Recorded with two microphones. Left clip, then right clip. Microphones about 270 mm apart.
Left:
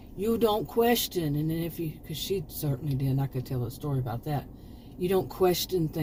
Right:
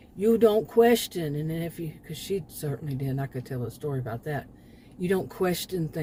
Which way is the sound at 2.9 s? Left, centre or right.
Right.